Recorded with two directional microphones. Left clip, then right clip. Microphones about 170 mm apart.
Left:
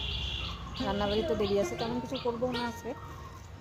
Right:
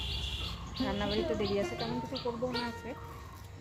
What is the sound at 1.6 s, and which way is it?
Speech, 5° left (ahead or behind).